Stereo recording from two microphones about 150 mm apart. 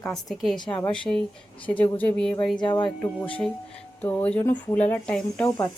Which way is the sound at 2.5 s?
30° left (ahead or behind).